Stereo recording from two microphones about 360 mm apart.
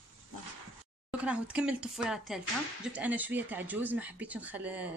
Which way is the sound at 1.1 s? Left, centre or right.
Centre.